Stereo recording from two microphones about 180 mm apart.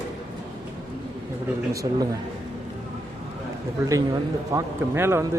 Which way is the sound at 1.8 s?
25° right (ahead or behind).